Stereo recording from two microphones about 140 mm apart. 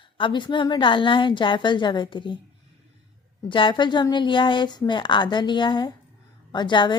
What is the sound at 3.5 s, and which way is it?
A woman's voice, 35° left (ahead or behind).